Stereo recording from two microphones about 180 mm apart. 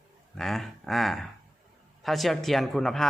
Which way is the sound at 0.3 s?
Centre (ahead or behind).